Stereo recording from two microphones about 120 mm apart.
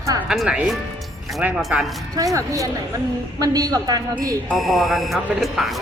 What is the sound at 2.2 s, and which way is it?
A woman's voice, 25° right (ahead or behind).